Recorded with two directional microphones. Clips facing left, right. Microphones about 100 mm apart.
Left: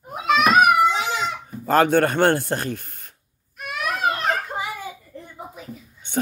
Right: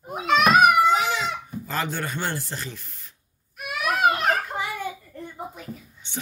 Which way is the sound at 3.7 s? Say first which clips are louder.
Right 2 dB; 5° right (ahead or behind).